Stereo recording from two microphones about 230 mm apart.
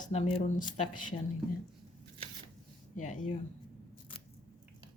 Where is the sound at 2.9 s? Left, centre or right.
Left.